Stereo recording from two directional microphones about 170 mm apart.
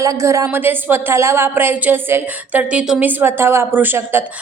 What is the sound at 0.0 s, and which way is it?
Speech, 20° right (ahead or behind).